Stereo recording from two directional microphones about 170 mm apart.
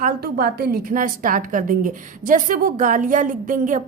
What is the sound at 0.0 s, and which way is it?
A woman's voice, 60° right (ahead or behind).